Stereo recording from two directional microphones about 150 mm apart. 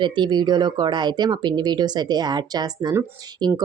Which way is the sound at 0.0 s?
30° right (ahead or behind).